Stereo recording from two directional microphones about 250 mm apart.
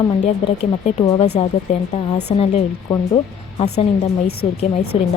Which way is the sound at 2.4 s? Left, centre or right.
Left.